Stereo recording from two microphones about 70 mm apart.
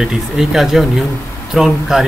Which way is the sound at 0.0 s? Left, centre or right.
Centre.